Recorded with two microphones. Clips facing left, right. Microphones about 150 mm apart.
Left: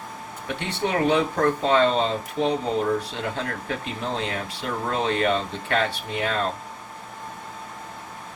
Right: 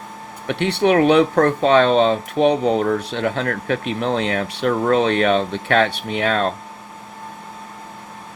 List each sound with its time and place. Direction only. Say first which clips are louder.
0.4 s speech: right 10 dB; 75° right (ahead or behind)